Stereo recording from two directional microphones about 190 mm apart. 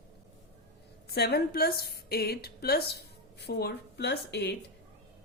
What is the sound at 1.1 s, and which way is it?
A woman's voice, 55° left (ahead or behind).